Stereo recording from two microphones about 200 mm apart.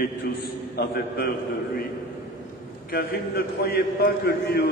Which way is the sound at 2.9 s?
50° left (ahead or behind).